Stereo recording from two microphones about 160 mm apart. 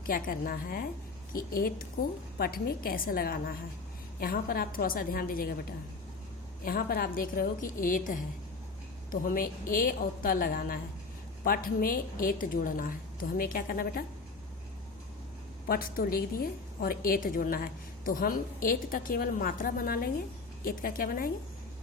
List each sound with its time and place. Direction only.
0.1 s a woman's voice: 65° left (ahead or behind)
6.7 s a woman's voice: 65° left (ahead or behind)
15.6 s a woman's voice: 65° left (ahead or behind)